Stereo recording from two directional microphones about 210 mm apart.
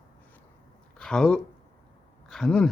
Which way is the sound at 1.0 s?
5° left (ahead or behind).